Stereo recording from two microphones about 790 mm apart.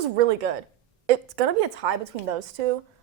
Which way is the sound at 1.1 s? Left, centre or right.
Right.